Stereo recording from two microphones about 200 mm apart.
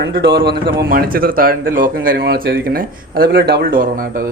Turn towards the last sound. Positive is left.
turn(degrees=-45)  # may be behind; listen again after turning